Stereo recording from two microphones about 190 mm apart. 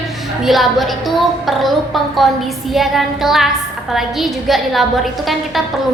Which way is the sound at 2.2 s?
Centre (ahead or behind).